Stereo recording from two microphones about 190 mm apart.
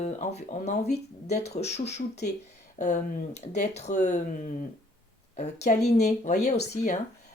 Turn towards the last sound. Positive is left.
turn(degrees=35)  # may be behind; listen again after turning